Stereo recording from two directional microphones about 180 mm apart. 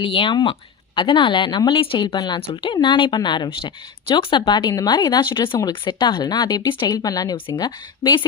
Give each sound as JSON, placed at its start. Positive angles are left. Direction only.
{"t": 0.0, "sound": "speech", "side_deg": 30}